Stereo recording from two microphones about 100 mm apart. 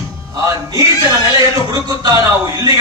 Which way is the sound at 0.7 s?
35° right (ahead or behind).